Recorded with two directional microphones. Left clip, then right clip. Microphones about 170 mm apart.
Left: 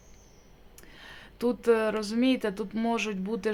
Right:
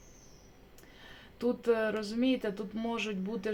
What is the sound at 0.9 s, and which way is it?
Speech, 30° left (ahead or behind).